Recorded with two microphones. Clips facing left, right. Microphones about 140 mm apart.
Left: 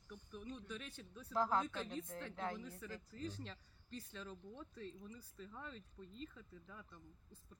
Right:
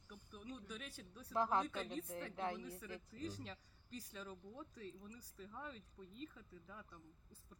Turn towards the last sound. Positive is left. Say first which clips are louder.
# left 1 dB
turn(degrees=-10)  # may be behind; listen again after turning